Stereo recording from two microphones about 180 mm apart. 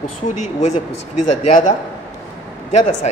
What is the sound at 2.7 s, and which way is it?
Speech, 40° left (ahead or behind).